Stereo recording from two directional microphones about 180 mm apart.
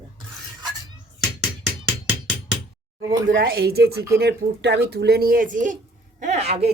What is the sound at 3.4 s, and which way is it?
A child's voice, 60° right (ahead or behind).